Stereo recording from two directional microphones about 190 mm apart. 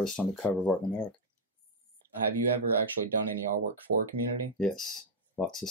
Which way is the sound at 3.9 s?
90° right.